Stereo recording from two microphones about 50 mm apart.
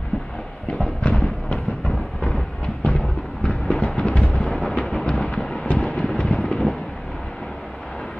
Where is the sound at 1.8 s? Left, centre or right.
Centre.